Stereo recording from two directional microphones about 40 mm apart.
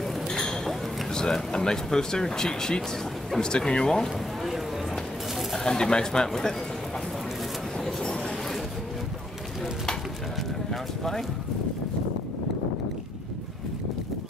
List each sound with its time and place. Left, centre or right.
0.3 s a sound: centre
1.1 s speech: centre
5.7 s speech: left
10.7 s speech: centre